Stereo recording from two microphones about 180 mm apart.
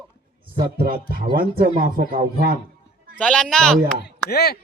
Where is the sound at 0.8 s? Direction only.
55° right (ahead or behind).